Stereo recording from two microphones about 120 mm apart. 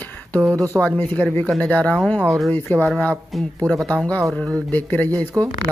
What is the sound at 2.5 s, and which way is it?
Speech, 15° left (ahead or behind).